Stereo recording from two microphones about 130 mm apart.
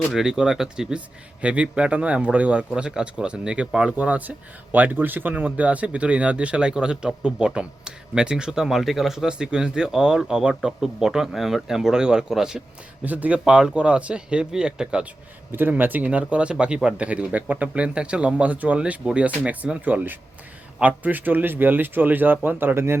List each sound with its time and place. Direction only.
0.1 s speech: 5° right (ahead or behind)